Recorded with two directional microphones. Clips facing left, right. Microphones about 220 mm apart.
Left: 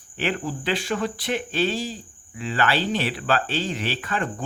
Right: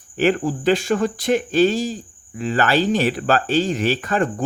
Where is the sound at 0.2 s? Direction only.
45° right (ahead or behind).